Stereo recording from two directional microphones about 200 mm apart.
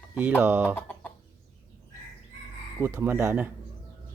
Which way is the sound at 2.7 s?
10° right (ahead or behind).